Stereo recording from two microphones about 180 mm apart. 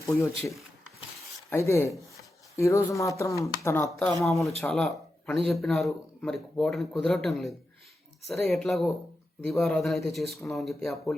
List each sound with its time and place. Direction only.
0.0 s speech: 15° left (ahead or behind)
3.8 s a man's voice: centre (ahead or behind)